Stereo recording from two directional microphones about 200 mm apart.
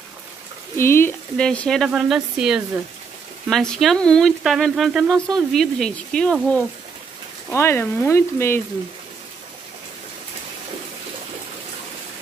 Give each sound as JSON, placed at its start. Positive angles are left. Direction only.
{"t": 0.7, "sound": "speech", "side_deg": 10}
{"t": 7.5, "sound": "frying", "side_deg": 10}